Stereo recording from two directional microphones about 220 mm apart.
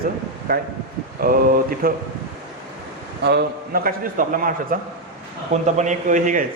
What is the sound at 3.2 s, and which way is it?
A man's voice, 45° right (ahead or behind).